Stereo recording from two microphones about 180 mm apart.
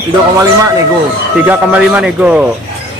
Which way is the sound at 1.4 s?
10° right (ahead or behind).